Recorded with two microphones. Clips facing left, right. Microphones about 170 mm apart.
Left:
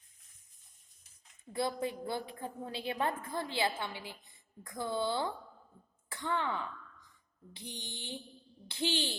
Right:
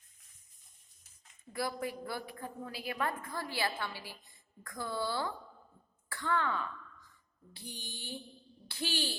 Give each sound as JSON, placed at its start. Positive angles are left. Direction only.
{"t": 1.5, "sound": "a woman's voice", "side_deg": 25}
{"t": 6.1, "sound": "throat clearing", "side_deg": 20}
{"t": 7.5, "sound": "a woman's voice", "side_deg": 20}